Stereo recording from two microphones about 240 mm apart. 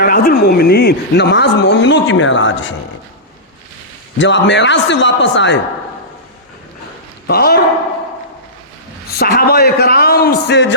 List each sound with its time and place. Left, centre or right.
0.0 s speech: left
4.2 s speech: left
7.3 s speech: left
9.1 s a man's voice: left